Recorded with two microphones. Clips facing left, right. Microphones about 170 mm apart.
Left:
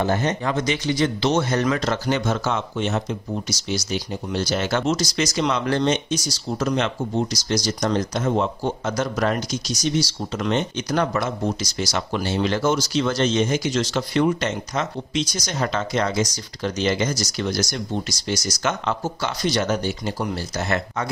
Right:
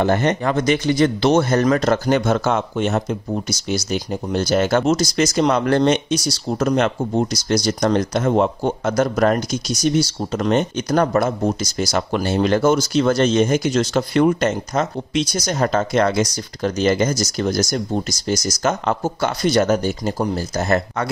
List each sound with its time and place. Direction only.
0.0 s speech: 65° right (ahead or behind)
6.7 s speech: 50° right (ahead or behind)